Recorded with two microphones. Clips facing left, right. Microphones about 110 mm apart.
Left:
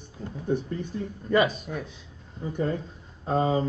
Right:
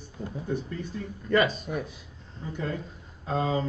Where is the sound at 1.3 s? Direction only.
10° left (ahead or behind).